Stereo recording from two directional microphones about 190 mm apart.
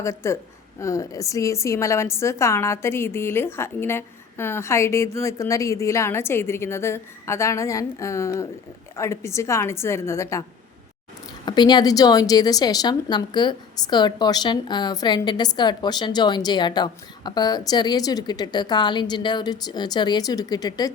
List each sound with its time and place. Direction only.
0.0 s a woman's voice: 15° left (ahead or behind)
11.4 s a woman's voice: 25° left (ahead or behind)